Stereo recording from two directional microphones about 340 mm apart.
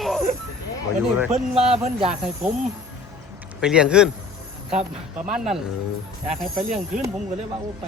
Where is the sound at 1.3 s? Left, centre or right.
Centre.